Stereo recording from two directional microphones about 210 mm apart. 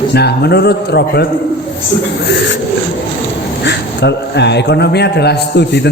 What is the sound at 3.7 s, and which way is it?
A man's voice, 55° left (ahead or behind).